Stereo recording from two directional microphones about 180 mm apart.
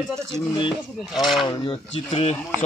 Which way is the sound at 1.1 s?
Centre (ahead or behind).